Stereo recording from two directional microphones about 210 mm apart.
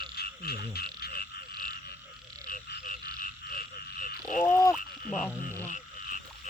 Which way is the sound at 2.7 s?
40° left (ahead or behind).